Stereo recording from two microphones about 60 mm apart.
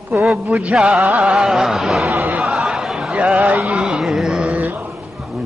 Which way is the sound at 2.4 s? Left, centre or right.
Centre.